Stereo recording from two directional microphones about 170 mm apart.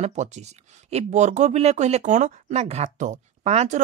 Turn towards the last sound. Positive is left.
turn(degrees=-40)  # may be behind; listen again after turning